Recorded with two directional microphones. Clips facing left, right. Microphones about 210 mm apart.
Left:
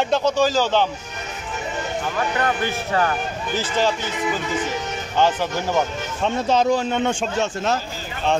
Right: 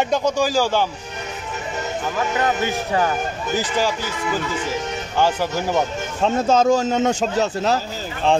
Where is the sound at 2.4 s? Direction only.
15° right (ahead or behind).